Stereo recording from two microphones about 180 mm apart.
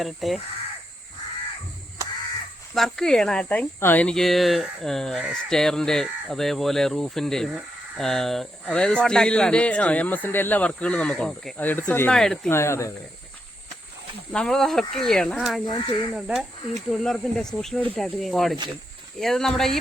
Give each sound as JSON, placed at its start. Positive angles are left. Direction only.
{"t": 0.0, "sound": "speech", "side_deg": 0}
{"t": 2.7, "sound": "speech", "side_deg": 0}
{"t": 12.5, "sound": "speech", "side_deg": 15}
{"t": 14.3, "sound": "speech", "side_deg": 5}
{"t": 15.7, "sound": "speech", "side_deg": 30}
{"t": 16.1, "sound": "speech", "side_deg": -5}